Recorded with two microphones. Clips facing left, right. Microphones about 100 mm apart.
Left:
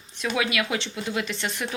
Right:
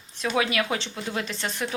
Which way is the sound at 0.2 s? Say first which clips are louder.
Right 1 dB; 35° right (ahead or behind).